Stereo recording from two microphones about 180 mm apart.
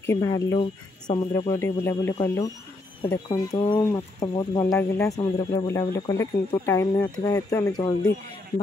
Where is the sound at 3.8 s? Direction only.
15° left (ahead or behind).